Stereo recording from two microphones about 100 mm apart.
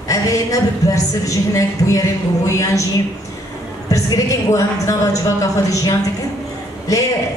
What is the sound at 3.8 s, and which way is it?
A woman's voice, 35° left (ahead or behind).